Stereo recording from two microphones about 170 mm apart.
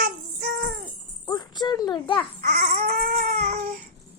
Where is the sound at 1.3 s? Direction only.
25° left (ahead or behind).